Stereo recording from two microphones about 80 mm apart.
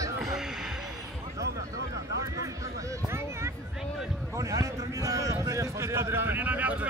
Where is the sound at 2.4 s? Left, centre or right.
Right.